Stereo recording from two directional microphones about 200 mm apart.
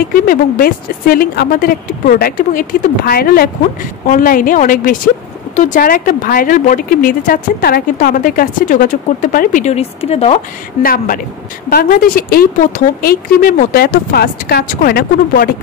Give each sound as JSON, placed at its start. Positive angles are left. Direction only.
{"t": 0.1, "sound": "speech", "side_deg": 45}
{"t": 10.8, "sound": "speech", "side_deg": 45}